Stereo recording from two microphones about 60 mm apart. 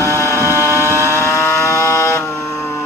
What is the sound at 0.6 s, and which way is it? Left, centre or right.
Vehicle, right.